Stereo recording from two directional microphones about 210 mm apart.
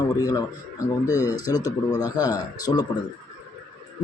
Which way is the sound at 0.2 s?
15° left (ahead or behind).